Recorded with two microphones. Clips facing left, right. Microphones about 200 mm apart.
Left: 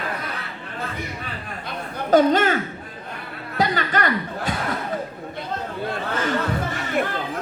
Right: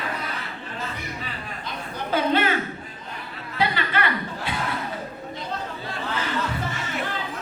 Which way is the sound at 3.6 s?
45° left (ahead or behind).